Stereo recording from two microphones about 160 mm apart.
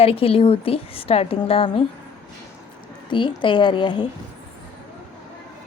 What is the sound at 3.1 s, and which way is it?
Speech, 30° left (ahead or behind).